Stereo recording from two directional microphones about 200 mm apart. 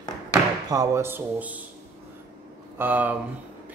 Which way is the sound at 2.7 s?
10° right (ahead or behind).